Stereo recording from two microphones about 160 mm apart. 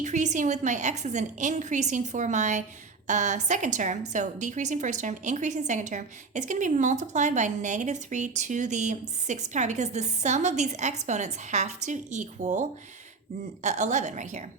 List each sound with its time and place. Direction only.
0.0 s a woman's voice: 50° right (ahead or behind)